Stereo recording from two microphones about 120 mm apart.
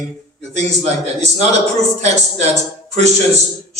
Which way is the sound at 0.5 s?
65° right (ahead or behind).